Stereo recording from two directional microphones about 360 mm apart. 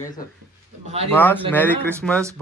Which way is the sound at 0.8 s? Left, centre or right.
Centre.